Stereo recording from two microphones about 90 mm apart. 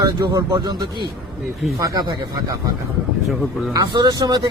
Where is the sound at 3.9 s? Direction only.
50° right (ahead or behind).